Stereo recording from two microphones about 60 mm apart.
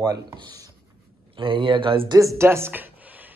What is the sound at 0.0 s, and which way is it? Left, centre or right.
Speech, right.